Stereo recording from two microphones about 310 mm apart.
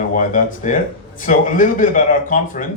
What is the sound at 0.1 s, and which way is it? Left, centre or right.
Speech, left.